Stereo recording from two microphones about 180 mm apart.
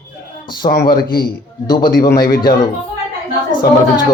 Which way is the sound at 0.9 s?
55° left (ahead or behind).